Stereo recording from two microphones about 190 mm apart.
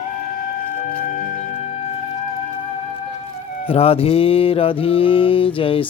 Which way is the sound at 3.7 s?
30° left (ahead or behind).